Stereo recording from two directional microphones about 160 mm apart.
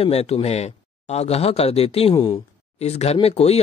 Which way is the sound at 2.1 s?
25° left (ahead or behind).